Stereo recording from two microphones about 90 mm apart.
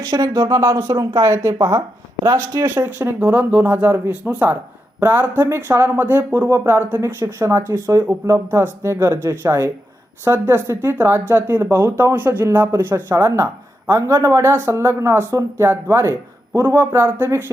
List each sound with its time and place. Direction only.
0.0 s speech: 45° right (ahead or behind)
2.6 s speech: 25° right (ahead or behind)